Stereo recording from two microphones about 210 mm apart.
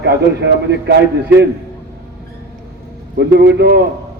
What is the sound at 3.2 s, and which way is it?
Speech, 55° right (ahead or behind).